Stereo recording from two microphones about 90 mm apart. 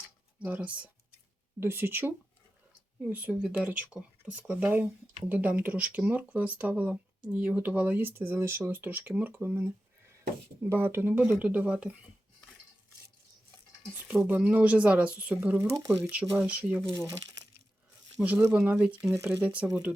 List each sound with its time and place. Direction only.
0.4 s speech: 15° right (ahead or behind)
1.5 s speech: 25° right (ahead or behind)
14.1 s speech: 15° right (ahead or behind)
18.2 s speech: 15° right (ahead or behind)